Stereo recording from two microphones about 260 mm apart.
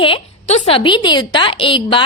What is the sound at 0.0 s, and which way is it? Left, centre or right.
A woman's voice, left.